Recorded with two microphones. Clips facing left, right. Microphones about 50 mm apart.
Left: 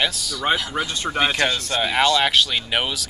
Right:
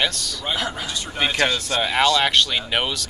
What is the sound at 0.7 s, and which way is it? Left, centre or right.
Speech, left.